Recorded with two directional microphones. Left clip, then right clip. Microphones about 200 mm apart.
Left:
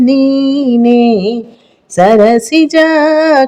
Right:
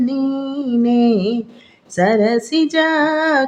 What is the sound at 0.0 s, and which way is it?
Mantra, 40° left (ahead or behind).